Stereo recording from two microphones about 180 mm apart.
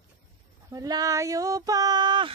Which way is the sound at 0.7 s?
20° right (ahead or behind).